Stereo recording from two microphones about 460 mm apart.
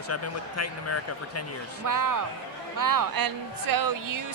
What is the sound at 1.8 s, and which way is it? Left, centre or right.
Speech, right.